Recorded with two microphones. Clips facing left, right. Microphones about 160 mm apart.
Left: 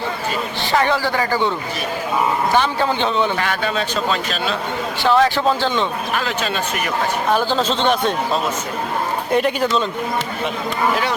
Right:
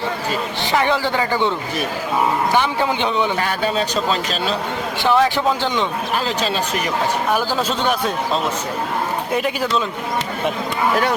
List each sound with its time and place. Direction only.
0.6 s a man's voice: 20° right (ahead or behind)
2.5 s a man's voice: 15° right (ahead or behind)
3.6 s a man's voice: 35° right (ahead or behind)
5.0 s a man's voice: 15° right (ahead or behind)
7.3 s a man's voice: 10° right (ahead or behind)
9.3 s a man's voice: 5° right (ahead or behind)